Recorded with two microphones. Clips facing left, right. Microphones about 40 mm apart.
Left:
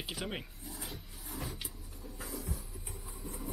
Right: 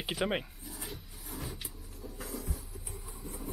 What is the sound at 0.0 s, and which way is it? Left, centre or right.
Speech, centre.